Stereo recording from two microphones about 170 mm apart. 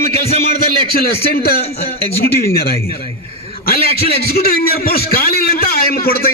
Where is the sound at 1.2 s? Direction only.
65° left (ahead or behind).